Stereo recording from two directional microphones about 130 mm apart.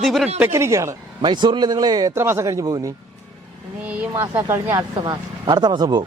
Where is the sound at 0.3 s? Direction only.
20° right (ahead or behind).